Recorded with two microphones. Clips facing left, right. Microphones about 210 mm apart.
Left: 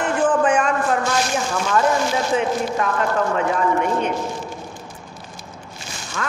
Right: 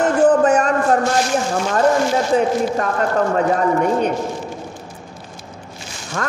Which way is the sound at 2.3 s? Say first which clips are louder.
Right 5 dB; 40° right (ahead or behind).